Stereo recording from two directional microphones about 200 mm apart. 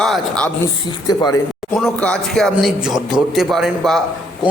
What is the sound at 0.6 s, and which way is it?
Speech, 15° left (ahead or behind).